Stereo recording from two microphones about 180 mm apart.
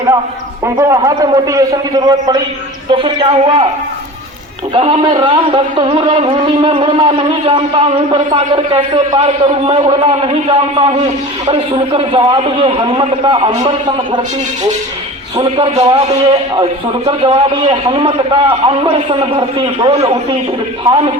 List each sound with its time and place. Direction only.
0.6 s a man's voice: 20° right (ahead or behind)
4.7 s a man's voice: 30° right (ahead or behind)
15.4 s a man's voice: 30° right (ahead or behind)
17.1 s a man's voice: 30° right (ahead or behind)